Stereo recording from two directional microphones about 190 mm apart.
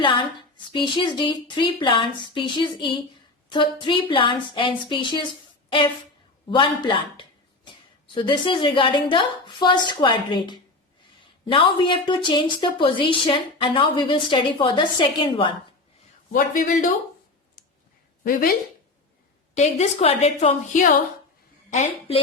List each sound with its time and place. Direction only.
0.0 s a woman's voice: 25° left (ahead or behind)
6.5 s a woman's voice: 25° left (ahead or behind)
16.3 s a man's voice: 45° left (ahead or behind)
18.2 s speech: 50° left (ahead or behind)
19.5 s a woman's voice: 35° left (ahead or behind)